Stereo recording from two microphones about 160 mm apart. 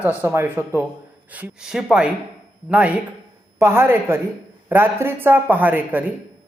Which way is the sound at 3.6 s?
15° right (ahead or behind).